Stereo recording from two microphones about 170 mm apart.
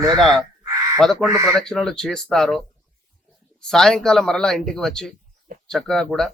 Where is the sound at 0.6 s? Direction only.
20° right (ahead or behind).